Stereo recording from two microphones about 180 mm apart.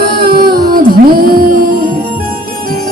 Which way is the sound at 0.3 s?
55° right (ahead or behind).